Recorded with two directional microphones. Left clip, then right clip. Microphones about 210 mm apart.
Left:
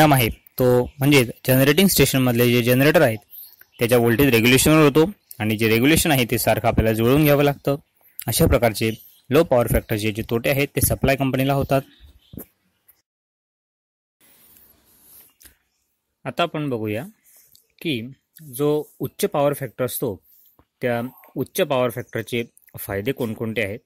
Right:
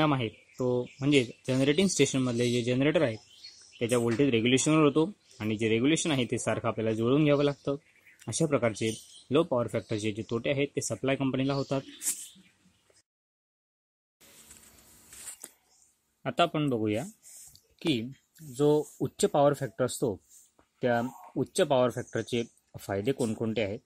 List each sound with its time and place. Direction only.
0.0 s speech: 45° left (ahead or behind)
16.2 s a sound: 30° left (ahead or behind)
18.5 s speech: 40° left (ahead or behind)